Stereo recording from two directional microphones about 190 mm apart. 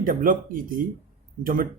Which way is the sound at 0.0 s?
45° right (ahead or behind).